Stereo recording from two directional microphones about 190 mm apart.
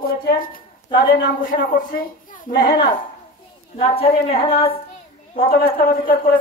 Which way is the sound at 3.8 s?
30° left (ahead or behind).